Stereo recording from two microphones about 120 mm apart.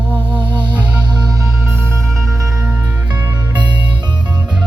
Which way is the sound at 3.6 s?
40° right (ahead or behind).